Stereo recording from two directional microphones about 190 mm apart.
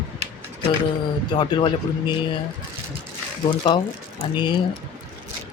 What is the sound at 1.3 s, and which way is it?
Speech, 25° left (ahead or behind).